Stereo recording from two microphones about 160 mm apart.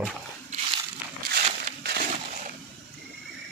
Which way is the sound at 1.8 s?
80° right.